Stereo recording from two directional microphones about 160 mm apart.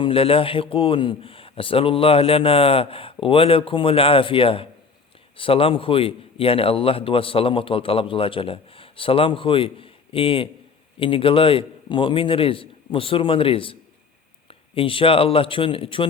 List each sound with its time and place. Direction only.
0.0 s a man's voice: 35° left (ahead or behind)